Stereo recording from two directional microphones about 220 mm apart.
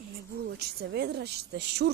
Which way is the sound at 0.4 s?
45° right (ahead or behind).